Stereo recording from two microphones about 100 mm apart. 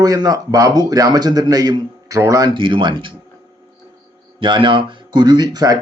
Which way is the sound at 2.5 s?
55° right (ahead or behind).